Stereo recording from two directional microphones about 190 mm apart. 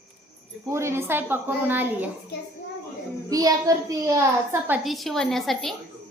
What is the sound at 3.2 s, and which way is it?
A woman's voice, 20° right (ahead or behind).